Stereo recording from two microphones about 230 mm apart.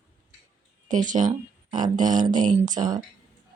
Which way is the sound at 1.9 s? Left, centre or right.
Right.